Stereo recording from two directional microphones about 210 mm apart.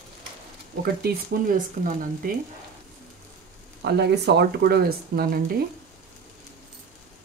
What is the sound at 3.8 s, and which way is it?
Speech, 50° right (ahead or behind).